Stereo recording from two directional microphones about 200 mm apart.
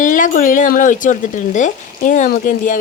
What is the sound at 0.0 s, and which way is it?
A woman's voice, 40° left (ahead or behind).